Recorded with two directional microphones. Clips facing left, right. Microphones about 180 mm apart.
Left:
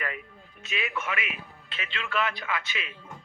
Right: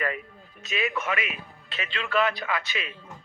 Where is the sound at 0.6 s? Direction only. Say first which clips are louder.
Right 4 dB; 40° right (ahead or behind).